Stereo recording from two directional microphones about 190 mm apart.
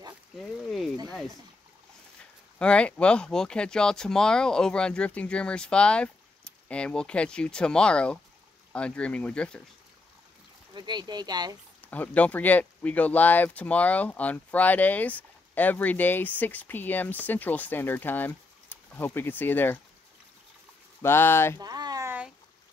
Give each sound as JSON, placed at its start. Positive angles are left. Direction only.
{"t": 0.7, "sound": "a sound", "side_deg": 0}
{"t": 2.6, "sound": "speech", "side_deg": 5}
{"t": 10.7, "sound": "speech", "side_deg": -25}
{"t": 11.8, "sound": "speech", "side_deg": 10}
{"t": 21.0, "sound": "speech", "side_deg": 10}
{"t": 21.5, "sound": "a sound", "side_deg": -20}